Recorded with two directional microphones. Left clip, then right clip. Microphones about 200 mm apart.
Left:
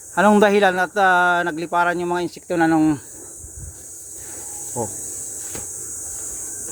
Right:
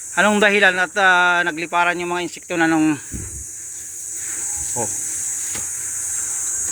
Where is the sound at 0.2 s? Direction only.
30° left (ahead or behind).